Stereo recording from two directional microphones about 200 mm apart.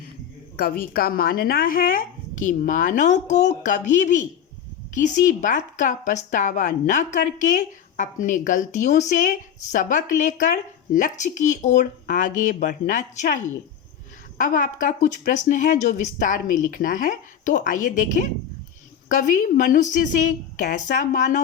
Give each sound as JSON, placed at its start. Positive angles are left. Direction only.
{"t": 0.5, "sound": "a woman's voice", "side_deg": 45}